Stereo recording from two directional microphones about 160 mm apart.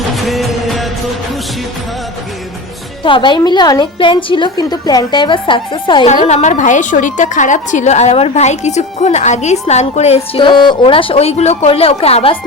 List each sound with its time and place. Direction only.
0.2 s music: centre (ahead or behind)
3.0 s a woman's voice: 30° left (ahead or behind)
6.1 s a woman's voice: 45° left (ahead or behind)